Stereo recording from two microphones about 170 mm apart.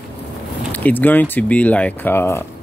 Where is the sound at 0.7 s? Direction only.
10° left (ahead or behind).